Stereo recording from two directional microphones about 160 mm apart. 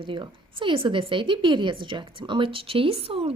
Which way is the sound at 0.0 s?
30° right (ahead or behind).